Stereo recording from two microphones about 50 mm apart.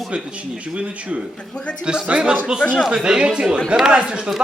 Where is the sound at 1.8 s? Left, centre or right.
Centre.